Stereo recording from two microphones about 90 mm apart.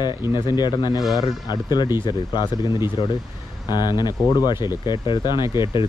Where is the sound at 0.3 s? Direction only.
55° left (ahead or behind).